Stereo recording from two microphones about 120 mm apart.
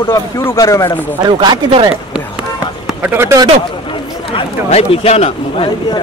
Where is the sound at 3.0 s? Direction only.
20° right (ahead or behind).